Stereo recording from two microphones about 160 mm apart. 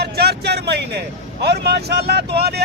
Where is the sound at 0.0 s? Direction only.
90° right.